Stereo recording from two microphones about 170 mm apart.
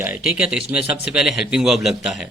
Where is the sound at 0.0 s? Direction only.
10° right (ahead or behind).